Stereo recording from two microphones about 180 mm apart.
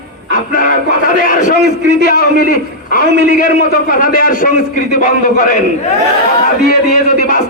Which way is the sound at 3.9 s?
50° left (ahead or behind).